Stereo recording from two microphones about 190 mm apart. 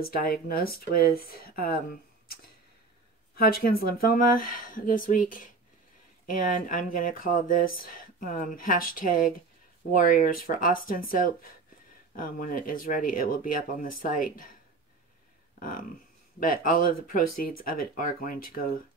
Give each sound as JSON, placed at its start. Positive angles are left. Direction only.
{"t": 0.0, "sound": "speech", "side_deg": 50}
{"t": 3.3, "sound": "speech", "side_deg": 50}
{"t": 16.3, "sound": "speech", "side_deg": 45}